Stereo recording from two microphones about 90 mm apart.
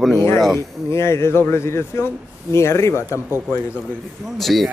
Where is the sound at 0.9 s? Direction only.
30° left (ahead or behind).